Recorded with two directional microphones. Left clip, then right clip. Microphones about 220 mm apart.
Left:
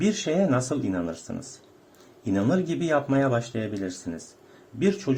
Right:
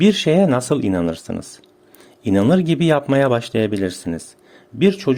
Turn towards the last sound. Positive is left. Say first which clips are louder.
# right 8 dB
turn(degrees=-40)  # may be behind; listen again after turning